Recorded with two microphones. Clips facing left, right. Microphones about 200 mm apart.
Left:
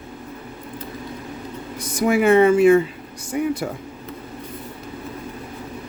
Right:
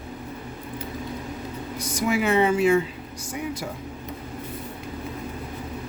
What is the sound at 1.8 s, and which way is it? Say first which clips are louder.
Speech: left 6 dB; 55° left (ahead or behind).